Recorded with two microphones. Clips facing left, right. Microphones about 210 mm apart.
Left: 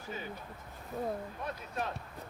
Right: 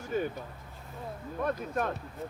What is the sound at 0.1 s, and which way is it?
Vehicle, 50° right (ahead or behind).